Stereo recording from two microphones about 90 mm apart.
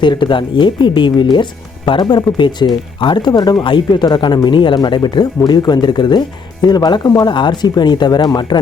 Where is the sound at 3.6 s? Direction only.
60° left (ahead or behind).